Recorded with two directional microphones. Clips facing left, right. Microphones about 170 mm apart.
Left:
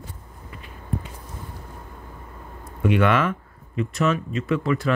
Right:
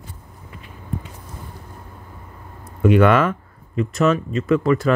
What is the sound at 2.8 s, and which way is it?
Speech, 45° right (ahead or behind).